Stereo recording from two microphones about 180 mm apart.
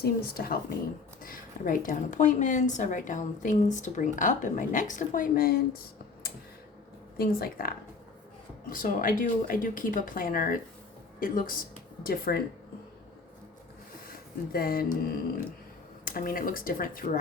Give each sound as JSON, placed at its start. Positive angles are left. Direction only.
{"t": 0.0, "sound": "a woman's voice", "side_deg": 55}
{"t": 7.2, "sound": "speech", "side_deg": 55}
{"t": 8.7, "sound": "a woman's voice", "side_deg": 50}
{"t": 14.5, "sound": "speech", "side_deg": 55}
{"t": 16.0, "sound": "a woman's voice", "side_deg": 50}